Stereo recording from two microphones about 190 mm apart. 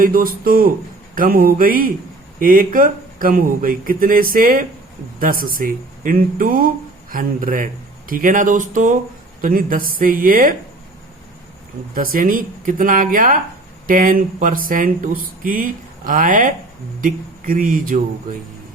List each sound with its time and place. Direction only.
0.0 s speech: 50° right (ahead or behind)
11.9 s speech: 45° right (ahead or behind)